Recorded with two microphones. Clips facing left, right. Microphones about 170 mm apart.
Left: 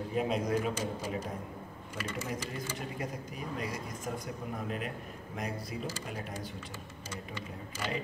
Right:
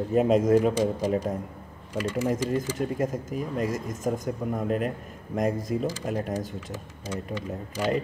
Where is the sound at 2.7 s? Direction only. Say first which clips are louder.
Right 11 dB; 45° right (ahead or behind).